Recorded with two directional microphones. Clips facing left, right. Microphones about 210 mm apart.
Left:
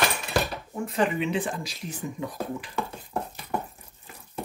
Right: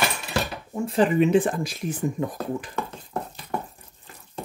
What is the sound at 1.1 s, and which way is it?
Speech, 45° right (ahead or behind).